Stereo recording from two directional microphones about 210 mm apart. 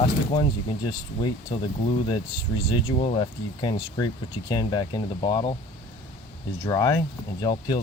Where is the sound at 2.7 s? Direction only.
25° left (ahead or behind).